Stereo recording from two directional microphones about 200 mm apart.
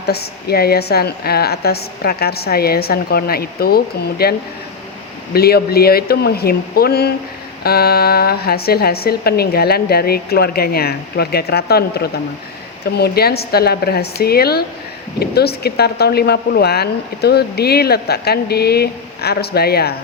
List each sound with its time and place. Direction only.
0.0 s speech: 55° left (ahead or behind)